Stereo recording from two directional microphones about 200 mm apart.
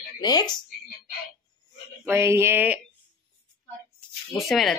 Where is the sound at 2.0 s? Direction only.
15° right (ahead or behind).